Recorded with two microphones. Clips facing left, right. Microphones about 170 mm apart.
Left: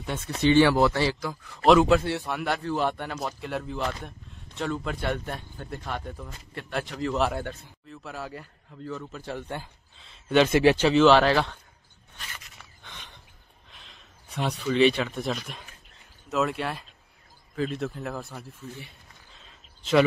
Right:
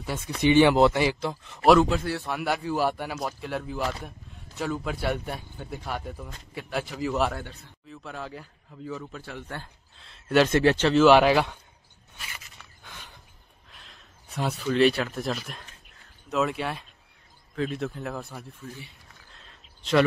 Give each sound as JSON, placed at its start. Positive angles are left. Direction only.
{"t": 0.0, "sound": "a man's voice", "side_deg": -10}
{"t": 2.2, "sound": "speech", "side_deg": -5}
{"t": 11.1, "sound": "speech", "side_deg": -10}
{"t": 12.2, "sound": "a sound", "side_deg": -5}
{"t": 13.7, "sound": "speech", "side_deg": 0}
{"t": 19.3, "sound": "a sound", "side_deg": 5}